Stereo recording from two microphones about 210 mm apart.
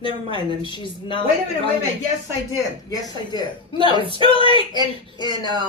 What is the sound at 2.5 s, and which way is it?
Speech, 20° left (ahead or behind).